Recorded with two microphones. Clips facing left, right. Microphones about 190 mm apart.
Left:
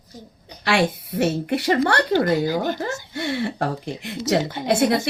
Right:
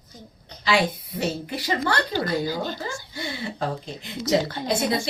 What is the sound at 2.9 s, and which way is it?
Speech, 70° left (ahead or behind).